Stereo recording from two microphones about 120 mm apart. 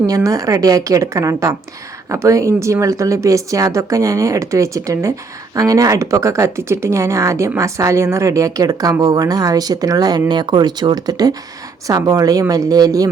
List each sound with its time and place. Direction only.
0.1 s speech: 30° right (ahead or behind)